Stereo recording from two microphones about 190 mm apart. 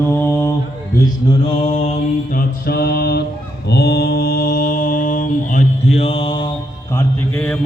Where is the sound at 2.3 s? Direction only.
55° left (ahead or behind); by 6.5 s 25° left (ahead or behind).